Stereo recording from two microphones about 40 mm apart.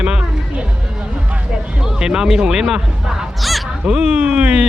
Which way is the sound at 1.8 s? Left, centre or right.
Centre.